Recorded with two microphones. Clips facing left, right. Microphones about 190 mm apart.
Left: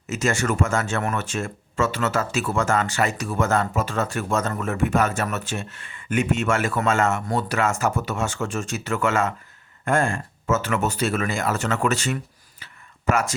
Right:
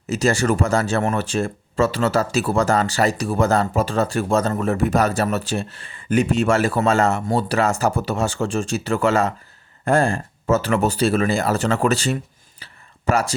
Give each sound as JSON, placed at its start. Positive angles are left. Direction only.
{"t": 0.1, "sound": "speech", "side_deg": -35}